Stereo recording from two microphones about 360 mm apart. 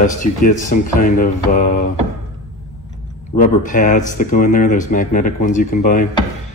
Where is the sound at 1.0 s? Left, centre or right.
Left.